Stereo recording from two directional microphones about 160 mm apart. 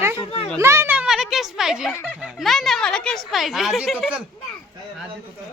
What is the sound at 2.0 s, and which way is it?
Speech, centre (ahead or behind).